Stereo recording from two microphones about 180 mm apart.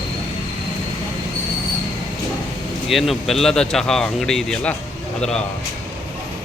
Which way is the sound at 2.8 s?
Centre (ahead or behind).